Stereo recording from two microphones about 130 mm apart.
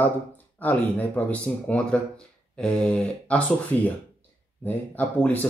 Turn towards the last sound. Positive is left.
turn(degrees=10)  # may be behind; listen again after turning